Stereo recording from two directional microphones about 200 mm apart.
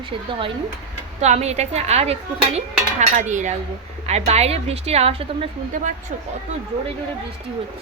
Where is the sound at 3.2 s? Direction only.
35° right (ahead or behind).